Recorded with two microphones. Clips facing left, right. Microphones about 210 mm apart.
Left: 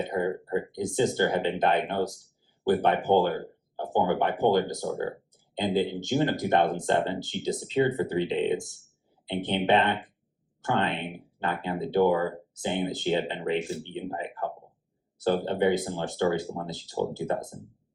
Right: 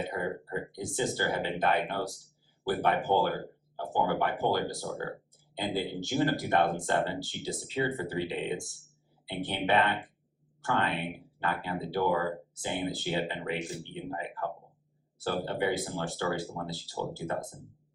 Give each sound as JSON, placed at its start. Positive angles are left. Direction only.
{"t": 0.0, "sound": "speech", "side_deg": 20}